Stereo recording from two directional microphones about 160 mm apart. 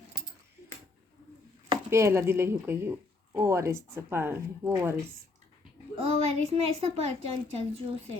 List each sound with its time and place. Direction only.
1.9 s speech: 15° right (ahead or behind)
6.0 s a child's voice: 40° right (ahead or behind)